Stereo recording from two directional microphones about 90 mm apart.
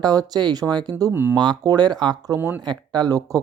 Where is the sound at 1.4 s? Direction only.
50° right (ahead or behind).